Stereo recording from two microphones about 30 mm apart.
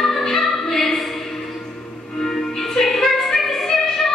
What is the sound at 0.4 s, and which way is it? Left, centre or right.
Music, centre.